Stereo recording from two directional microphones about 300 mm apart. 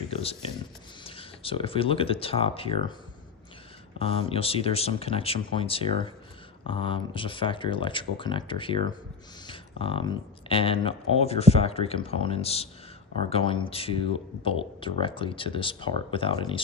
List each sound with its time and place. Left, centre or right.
0.1 s a sound: centre
1.0 s speech: centre
3.9 s speech: centre